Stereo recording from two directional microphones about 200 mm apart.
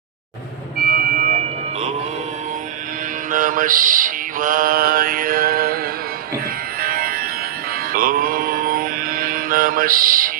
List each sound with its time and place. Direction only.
0.8 s a sound: 45° right (ahead or behind)
3.2 s mantra: 40° right (ahead or behind)
6.7 s music: 45° right (ahead or behind)